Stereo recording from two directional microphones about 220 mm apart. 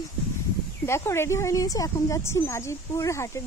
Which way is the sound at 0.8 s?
10° left (ahead or behind).